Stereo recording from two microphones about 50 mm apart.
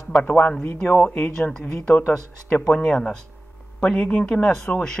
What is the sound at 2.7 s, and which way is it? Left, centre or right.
Speech, centre.